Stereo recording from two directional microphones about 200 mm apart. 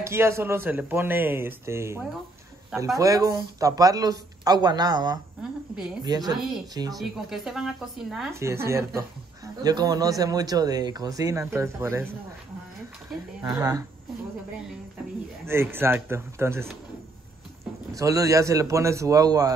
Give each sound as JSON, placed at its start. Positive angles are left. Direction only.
{"t": 0.0, "sound": "speech", "side_deg": -15}
{"t": 6.9, "sound": "speech", "side_deg": 0}
{"t": 8.3, "sound": "speech", "side_deg": -15}
{"t": 13.4, "sound": "speech", "side_deg": -15}
{"t": 15.4, "sound": "speech", "side_deg": -10}
{"t": 17.9, "sound": "speech", "side_deg": -15}